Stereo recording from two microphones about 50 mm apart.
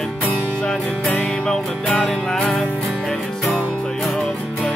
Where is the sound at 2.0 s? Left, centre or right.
Centre.